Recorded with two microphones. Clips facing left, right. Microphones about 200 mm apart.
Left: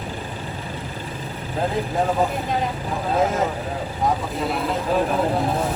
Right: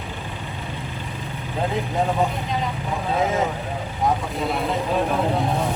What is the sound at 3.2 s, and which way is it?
Speech, centre (ahead or behind).